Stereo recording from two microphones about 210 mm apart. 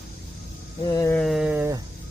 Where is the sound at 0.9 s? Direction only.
15° left (ahead or behind).